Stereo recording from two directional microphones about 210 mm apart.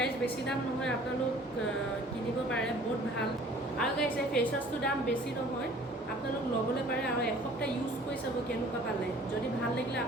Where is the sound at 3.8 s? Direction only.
5° left (ahead or behind).